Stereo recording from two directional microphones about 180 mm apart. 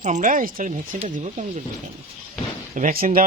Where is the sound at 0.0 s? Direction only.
45° right (ahead or behind).